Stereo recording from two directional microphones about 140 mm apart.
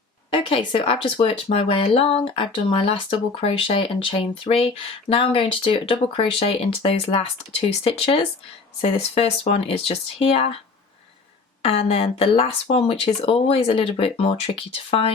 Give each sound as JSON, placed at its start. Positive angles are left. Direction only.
{"t": 0.3, "sound": "speech", "side_deg": 40}
{"t": 11.6, "sound": "speech", "side_deg": 45}